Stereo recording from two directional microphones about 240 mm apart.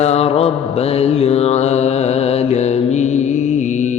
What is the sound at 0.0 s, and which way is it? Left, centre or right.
Mantra, left.